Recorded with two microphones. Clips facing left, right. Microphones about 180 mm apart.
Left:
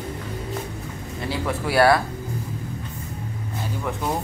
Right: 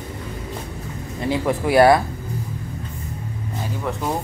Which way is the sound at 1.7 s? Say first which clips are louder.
Right 4 dB; 20° right (ahead or behind).